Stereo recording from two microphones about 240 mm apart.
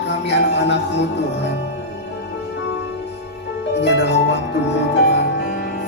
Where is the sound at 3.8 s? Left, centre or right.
Left.